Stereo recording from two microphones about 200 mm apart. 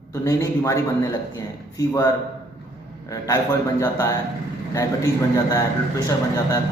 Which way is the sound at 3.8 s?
15° left (ahead or behind).